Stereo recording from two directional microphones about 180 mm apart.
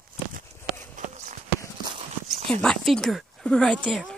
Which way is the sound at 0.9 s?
40° right (ahead or behind).